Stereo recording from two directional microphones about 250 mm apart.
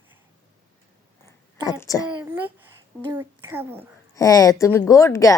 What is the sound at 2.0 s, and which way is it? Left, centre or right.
A woman's voice, centre.